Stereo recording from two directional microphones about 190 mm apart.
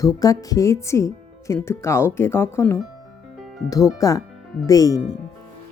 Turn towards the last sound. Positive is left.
turn(degrees=20)  # may be behind; listen again after turning